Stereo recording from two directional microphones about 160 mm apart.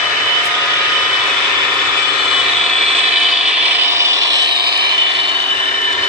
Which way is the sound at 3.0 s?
5° right (ahead or behind).